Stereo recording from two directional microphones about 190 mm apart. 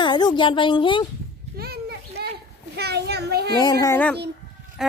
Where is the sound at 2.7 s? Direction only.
60° right (ahead or behind).